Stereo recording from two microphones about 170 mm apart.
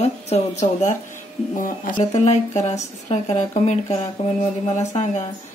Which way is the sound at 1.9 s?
40° left (ahead or behind).